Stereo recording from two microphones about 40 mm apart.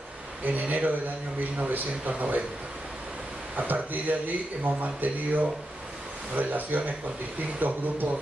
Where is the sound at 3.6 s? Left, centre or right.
Right.